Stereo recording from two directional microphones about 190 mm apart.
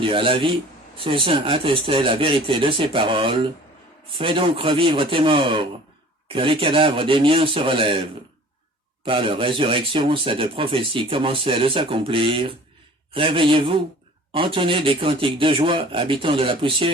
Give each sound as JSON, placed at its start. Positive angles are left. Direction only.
{"t": 0.0, "sound": "speech", "side_deg": -25}
{"t": 9.0, "sound": "speech", "side_deg": -30}